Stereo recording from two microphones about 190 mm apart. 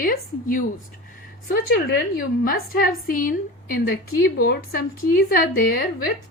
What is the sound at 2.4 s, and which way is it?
A woman's voice, 50° left (ahead or behind).